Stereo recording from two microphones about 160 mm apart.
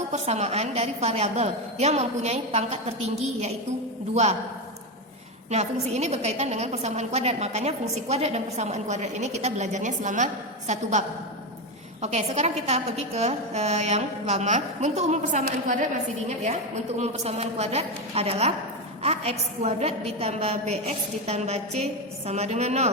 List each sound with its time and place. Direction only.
0.1 s a woman's voice: 45° right (ahead or behind)
4.1 s a woman's voice: 45° right (ahead or behind)
5.5 s a woman's voice: 45° right (ahead or behind)
12.0 s a woman's voice: 45° right (ahead or behind)
16.4 s a woman's voice: 45° right (ahead or behind)